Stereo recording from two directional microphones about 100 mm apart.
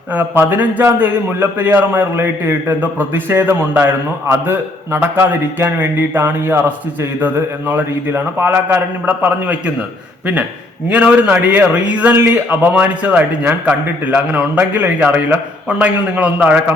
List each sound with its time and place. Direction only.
0.1 s a man's voice: 20° right (ahead or behind)
7.7 s a man's voice: 20° right (ahead or behind)
10.8 s a man's voice: 15° right (ahead or behind)